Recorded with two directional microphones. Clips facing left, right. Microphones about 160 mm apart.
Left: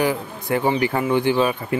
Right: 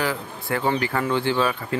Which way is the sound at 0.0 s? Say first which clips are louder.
Left 5 dB; 20° left (ahead or behind).